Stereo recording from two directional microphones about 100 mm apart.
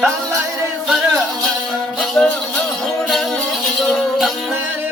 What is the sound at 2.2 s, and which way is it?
Music, 10° left (ahead or behind).